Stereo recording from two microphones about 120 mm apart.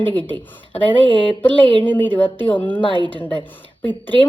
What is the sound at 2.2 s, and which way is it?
Speech, 45° left (ahead or behind).